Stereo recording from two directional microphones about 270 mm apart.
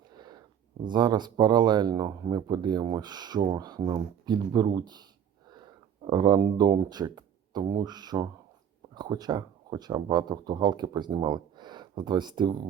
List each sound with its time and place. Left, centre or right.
0.2 s a sound: centre
0.9 s speech: centre
6.1 s speech: centre